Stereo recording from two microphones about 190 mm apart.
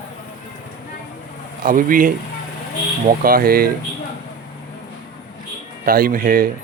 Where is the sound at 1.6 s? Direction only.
45° right (ahead or behind).